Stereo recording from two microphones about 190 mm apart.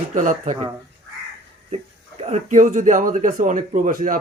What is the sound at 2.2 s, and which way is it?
A man's voice, 40° right (ahead or behind).